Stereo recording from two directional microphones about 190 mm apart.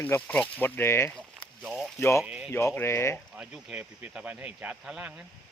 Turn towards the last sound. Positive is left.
turn(degrees=-5)  # may be behind; listen again after turning